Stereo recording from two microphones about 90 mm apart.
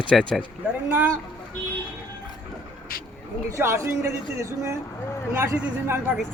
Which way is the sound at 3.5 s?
30° right (ahead or behind).